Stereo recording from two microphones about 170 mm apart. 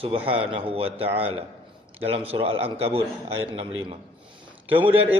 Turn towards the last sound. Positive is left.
turn(degrees=-30)  # may be behind; listen again after turning